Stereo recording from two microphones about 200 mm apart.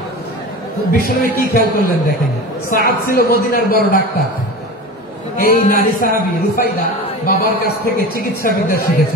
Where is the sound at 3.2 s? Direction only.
50° left (ahead or behind).